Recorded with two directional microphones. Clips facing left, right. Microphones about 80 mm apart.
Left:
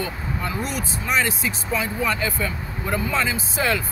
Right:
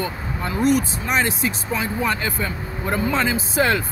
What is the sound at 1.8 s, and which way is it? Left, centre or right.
Speech, right.